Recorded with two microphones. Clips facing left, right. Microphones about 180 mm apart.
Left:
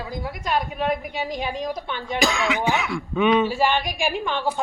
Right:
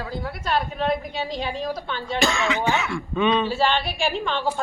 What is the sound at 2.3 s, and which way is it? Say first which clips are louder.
Speech: even; centre (ahead or behind).